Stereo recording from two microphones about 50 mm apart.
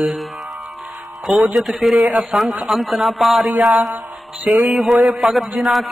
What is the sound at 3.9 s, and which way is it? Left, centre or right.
Music, right.